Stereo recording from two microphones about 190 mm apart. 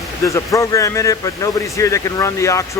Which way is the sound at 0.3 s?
15° left (ahead or behind).